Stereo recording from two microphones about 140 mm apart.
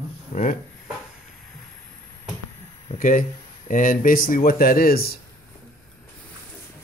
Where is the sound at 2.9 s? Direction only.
70° left (ahead or behind); by 5.1 s 90° left.